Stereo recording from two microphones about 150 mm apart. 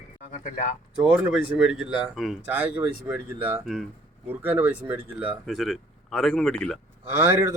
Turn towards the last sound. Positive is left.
turn(degrees=-15)  # may be behind; listen again after turning